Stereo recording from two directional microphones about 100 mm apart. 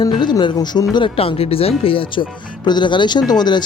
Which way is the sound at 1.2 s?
75° left (ahead or behind).